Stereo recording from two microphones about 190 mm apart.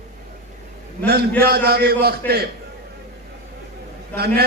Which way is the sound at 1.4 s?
55° right (ahead or behind).